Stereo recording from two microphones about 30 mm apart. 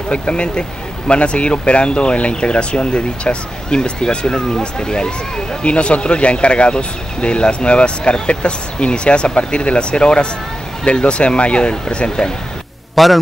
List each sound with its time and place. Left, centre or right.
0.1 s speech: left
12.2 s speech: left
12.9 s a man's voice: centre